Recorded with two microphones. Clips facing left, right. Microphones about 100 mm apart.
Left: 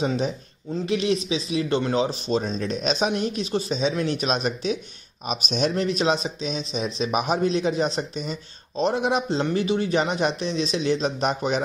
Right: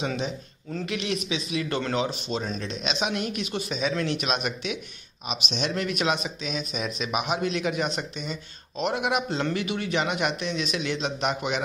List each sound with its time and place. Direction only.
0.0 s speech: 35° left (ahead or behind)
0.7 s speech: 20° left (ahead or behind)
0.9 s speech: 35° left (ahead or behind)
2.0 s speech: 35° left (ahead or behind)